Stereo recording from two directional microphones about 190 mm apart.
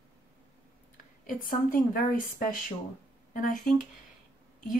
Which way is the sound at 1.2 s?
45° left (ahead or behind).